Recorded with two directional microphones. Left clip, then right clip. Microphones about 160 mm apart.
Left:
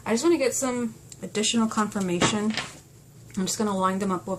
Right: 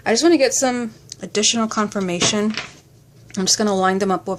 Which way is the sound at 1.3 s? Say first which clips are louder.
Right 6 dB; 35° right (ahead or behind).